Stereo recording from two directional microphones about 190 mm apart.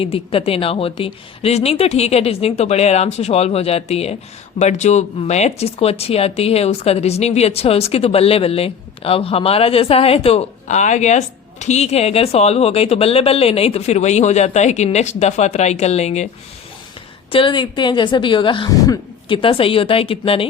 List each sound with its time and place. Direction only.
0.0 s speech: 30° left (ahead or behind)
17.3 s a woman's voice: 25° left (ahead or behind)